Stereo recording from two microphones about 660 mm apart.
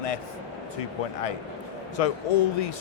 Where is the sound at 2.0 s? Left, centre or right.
Left.